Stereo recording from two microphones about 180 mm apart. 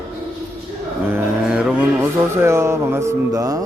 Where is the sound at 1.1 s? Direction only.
5° right (ahead or behind); by 3.6 s 20° right (ahead or behind).